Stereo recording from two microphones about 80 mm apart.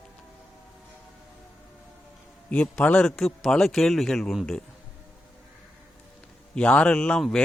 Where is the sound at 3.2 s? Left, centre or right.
Centre.